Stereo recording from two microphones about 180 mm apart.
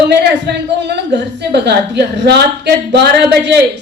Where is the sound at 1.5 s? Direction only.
70° right (ahead or behind).